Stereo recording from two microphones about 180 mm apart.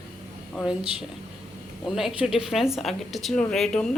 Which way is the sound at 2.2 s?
5° right (ahead or behind).